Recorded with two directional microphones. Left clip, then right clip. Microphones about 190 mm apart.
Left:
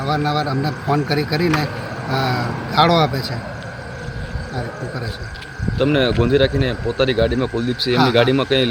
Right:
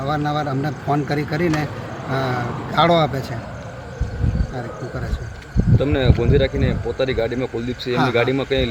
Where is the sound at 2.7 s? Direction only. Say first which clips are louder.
Left 1 dB; centre (ahead or behind).